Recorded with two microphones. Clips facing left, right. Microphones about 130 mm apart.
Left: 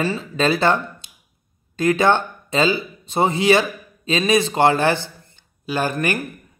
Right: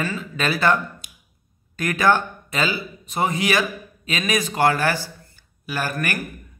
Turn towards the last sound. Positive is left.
turn(degrees=25)  # may be behind; listen again after turning